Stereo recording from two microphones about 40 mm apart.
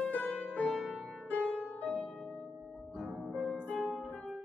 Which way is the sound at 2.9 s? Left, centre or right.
Centre.